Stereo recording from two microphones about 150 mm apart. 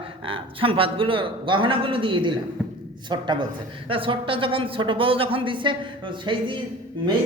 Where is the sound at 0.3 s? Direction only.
35° right (ahead or behind).